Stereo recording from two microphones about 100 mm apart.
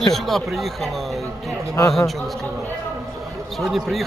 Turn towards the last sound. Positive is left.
turn(degrees=0)  # may be behind; listen again after turning